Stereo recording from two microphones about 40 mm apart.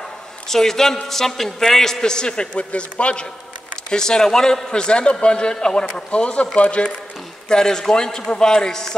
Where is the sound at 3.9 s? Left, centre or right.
Centre.